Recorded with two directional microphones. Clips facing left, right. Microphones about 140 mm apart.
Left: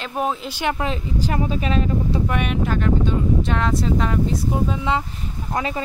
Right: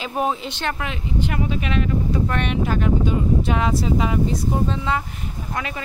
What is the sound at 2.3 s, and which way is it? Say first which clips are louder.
Speech: left 1 dB; 5° left (ahead or behind).